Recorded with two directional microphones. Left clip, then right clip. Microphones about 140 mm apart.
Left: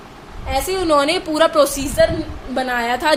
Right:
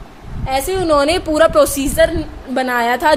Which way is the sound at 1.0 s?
50° right (ahead or behind).